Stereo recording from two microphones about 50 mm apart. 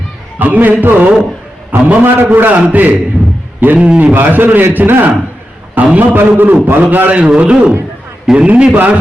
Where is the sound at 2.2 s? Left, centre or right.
Right.